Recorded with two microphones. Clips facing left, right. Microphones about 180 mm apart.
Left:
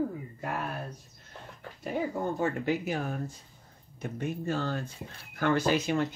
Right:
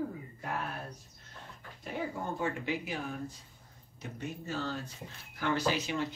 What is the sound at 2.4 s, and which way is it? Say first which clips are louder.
Speech: left 5 dB; 45° left (ahead or behind).